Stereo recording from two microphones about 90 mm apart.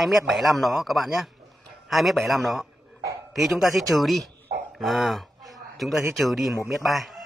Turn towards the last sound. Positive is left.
turn(degrees=0)  # may be behind; listen again after turning